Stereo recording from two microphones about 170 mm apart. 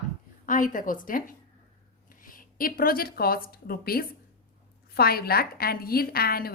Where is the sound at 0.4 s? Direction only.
50° left (ahead or behind).